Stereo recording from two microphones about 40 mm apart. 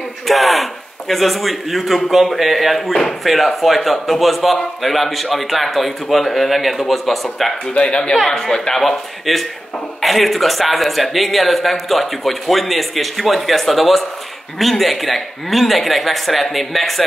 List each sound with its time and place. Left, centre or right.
0.3 s a man's voice: centre
7.7 s speech: left
8.4 s a man's voice: centre